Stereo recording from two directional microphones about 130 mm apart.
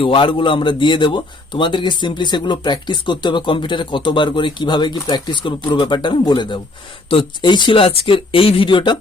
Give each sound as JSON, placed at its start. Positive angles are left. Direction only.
{"t": 0.0, "sound": "a man's voice", "side_deg": 40}